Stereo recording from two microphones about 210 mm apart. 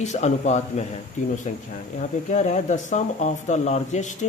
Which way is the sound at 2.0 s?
35° left (ahead or behind).